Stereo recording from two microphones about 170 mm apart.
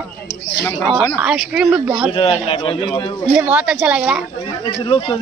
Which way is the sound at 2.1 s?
35° left (ahead or behind).